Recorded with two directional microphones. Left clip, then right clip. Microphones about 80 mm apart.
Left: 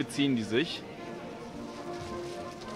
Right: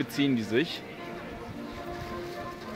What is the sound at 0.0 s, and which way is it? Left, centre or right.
Speech, right.